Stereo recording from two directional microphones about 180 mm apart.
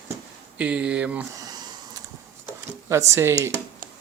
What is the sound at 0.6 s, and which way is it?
Speech, 5° right (ahead or behind).